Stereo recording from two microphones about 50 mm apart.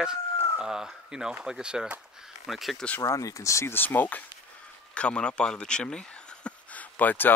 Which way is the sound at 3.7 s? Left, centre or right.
Left.